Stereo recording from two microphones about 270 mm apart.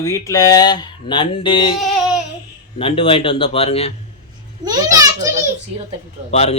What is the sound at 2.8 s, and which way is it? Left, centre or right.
Speech, centre.